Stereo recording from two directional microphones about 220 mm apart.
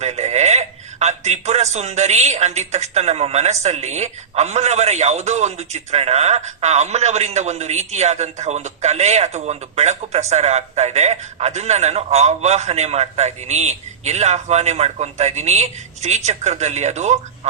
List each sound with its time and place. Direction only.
0.0 s a man's voice: 30° right (ahead or behind)